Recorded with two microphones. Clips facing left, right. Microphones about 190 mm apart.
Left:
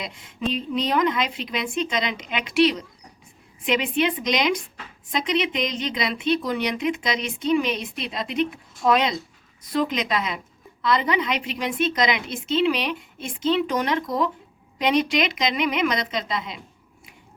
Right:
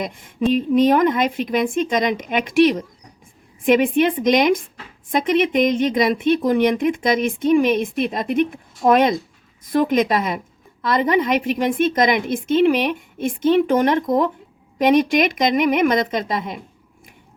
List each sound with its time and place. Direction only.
0.0 s a woman's voice: 50° right (ahead or behind)